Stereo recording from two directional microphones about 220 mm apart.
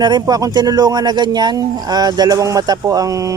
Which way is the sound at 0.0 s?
20° right (ahead or behind).